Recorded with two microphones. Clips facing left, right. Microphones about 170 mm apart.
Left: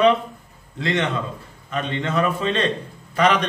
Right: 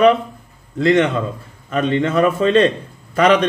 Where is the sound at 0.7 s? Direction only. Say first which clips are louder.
Right 8 dB; 45° right (ahead or behind).